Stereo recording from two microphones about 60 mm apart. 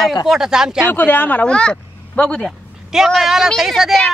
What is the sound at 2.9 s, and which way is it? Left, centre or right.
Speech, centre.